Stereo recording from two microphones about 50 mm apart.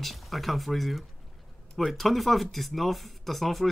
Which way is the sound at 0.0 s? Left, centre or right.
Centre.